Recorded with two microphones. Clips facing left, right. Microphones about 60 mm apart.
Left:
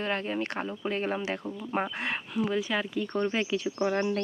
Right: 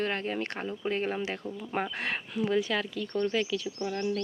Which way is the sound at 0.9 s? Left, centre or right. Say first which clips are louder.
Left 2 dB; left.